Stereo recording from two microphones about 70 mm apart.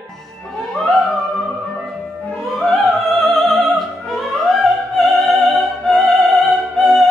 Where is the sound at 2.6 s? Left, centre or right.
Centre.